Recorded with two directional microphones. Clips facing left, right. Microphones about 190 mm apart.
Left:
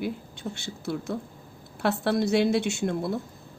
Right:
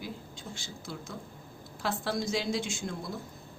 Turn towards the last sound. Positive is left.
turn(degrees=65)  # may be behind; listen again after turning